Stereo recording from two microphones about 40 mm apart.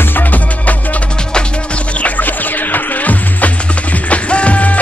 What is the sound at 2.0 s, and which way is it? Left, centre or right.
Music, left.